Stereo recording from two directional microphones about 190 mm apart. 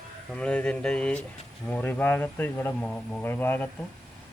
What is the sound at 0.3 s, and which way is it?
Speech, 5° left (ahead or behind).